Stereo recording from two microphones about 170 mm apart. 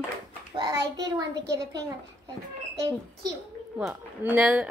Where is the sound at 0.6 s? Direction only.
25° right (ahead or behind).